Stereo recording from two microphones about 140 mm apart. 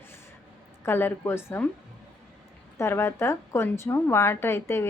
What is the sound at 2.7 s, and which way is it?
A woman's voice, 20° left (ahead or behind).